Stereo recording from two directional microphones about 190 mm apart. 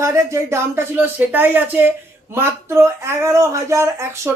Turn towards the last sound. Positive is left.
turn(degrees=-10)  # may be behind; listen again after turning